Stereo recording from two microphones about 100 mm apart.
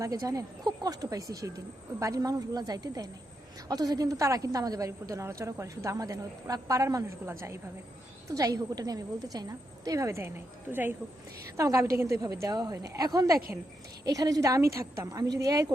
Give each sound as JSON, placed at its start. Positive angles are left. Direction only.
{"t": 0.0, "sound": "speech", "side_deg": -35}
{"t": 11.5, "sound": "speech", "side_deg": -30}